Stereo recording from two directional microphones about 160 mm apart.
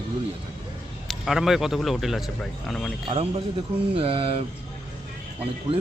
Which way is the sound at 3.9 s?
35° right (ahead or behind).